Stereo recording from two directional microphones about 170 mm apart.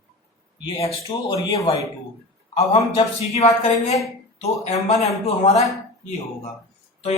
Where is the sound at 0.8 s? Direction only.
30° left (ahead or behind).